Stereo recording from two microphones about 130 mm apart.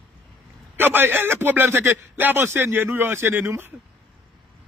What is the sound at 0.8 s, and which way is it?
A man's voice, 15° right (ahead or behind).